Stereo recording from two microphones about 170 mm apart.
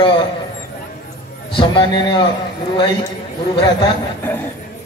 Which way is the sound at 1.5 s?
30° left (ahead or behind).